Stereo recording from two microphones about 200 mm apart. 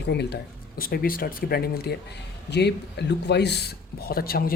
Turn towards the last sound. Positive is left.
turn(degrees=50)  # may be behind; listen again after turning